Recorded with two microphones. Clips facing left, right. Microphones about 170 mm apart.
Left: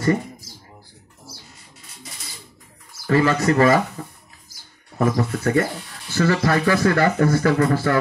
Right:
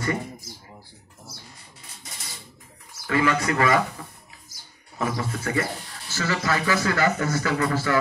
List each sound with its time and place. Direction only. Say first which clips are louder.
3.1 s speech: left 5 dB; 40° left (ahead or behind)
4.9 s speech: left 7 dB; 45° left (ahead or behind)